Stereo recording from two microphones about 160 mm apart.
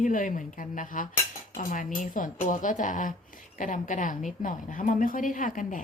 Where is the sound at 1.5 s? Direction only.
55° left (ahead or behind).